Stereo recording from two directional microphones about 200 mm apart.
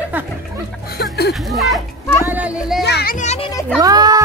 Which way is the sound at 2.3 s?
5° right (ahead or behind).